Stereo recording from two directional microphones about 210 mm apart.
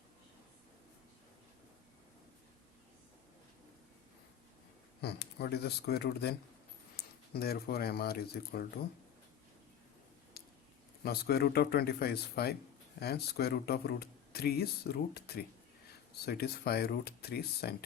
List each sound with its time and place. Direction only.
4.9 s speech: 50° left (ahead or behind)
11.0 s speech: 50° left (ahead or behind)